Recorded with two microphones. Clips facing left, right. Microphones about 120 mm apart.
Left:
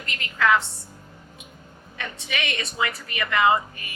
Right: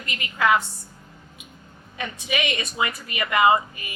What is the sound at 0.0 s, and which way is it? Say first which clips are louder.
Speech: right 1 dB; 15° right (ahead or behind).